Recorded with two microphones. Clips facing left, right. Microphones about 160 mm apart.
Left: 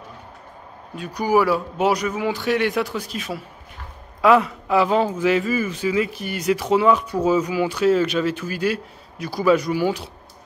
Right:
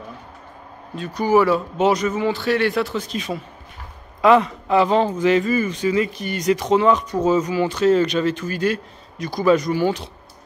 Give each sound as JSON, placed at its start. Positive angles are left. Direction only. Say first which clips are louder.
{"t": 0.9, "sound": "speech", "louder": "right 2 dB", "side_deg": 10}